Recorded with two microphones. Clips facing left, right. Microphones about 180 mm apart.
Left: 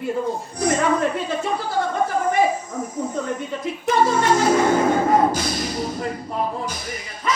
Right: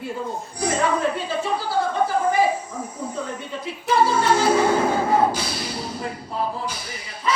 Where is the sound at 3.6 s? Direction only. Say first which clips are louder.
Even; 30° right (ahead or behind).